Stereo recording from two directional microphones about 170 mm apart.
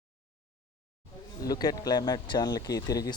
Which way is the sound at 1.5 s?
20° left (ahead or behind).